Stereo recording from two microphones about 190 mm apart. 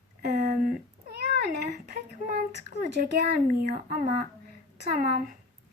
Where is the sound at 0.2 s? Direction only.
50° right (ahead or behind).